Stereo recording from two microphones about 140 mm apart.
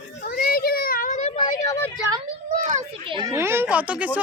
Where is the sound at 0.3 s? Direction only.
90° left; by 1.3 s 65° left (ahead or behind).